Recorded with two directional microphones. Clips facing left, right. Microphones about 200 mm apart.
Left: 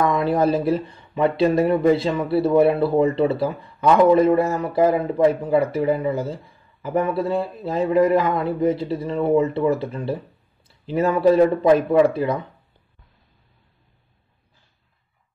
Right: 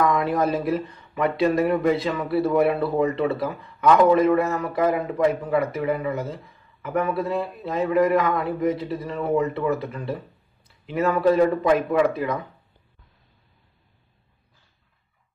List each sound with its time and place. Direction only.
0.0 s speech: 30° left (ahead or behind)